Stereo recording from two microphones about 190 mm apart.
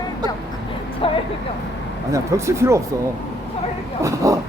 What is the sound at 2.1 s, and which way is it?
Speech, 15° right (ahead or behind).